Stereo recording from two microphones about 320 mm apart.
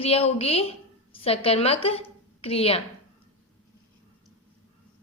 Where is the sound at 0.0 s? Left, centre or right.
Centre.